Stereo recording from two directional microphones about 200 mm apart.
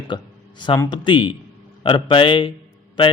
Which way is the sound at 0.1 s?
25° left (ahead or behind).